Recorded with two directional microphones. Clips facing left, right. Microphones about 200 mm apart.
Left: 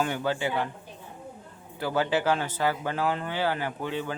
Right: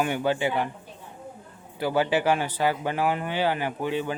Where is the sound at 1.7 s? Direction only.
15° right (ahead or behind).